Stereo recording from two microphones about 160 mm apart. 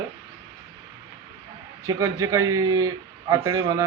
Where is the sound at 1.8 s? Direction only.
20° right (ahead or behind).